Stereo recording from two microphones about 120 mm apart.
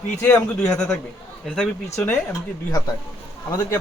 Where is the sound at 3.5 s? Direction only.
25° left (ahead or behind).